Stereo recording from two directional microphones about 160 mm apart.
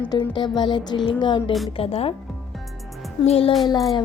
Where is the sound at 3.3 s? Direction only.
40° left (ahead or behind).